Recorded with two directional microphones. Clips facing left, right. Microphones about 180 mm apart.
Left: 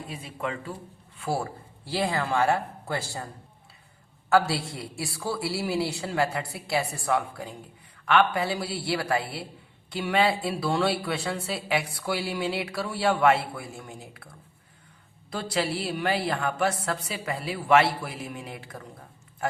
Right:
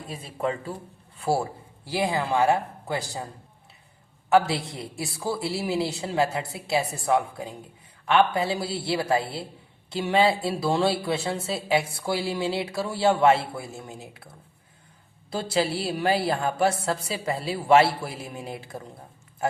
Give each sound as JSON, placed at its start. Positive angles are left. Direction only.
{"t": 0.1, "sound": "speech", "side_deg": -35}
{"t": 1.9, "sound": "speech", "side_deg": -15}
{"t": 4.3, "sound": "speech", "side_deg": -20}
{"t": 15.3, "sound": "speech", "side_deg": -30}